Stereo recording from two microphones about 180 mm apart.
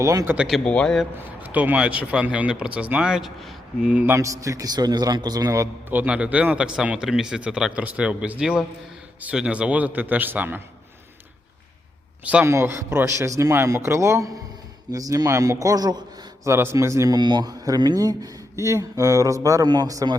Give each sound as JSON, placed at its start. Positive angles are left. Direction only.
{"t": 0.0, "sound": "speech", "side_deg": -15}
{"t": 0.3, "sound": "speech", "side_deg": 0}
{"t": 1.4, "sound": "speech", "side_deg": -10}
{"t": 12.2, "sound": "a man's voice", "side_deg": -5}